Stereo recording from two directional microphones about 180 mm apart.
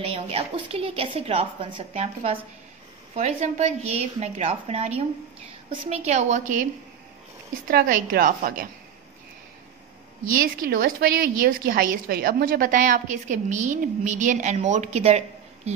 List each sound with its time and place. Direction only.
0.0 s a woman's voice: 30° right (ahead or behind)
7.6 s a woman's voice: 55° right (ahead or behind)
10.3 s a woman's voice: 55° right (ahead or behind); by 15.7 s 40° right (ahead or behind)